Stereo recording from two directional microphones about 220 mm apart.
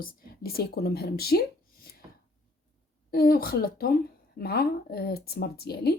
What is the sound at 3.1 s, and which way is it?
Speech, 45° left (ahead or behind).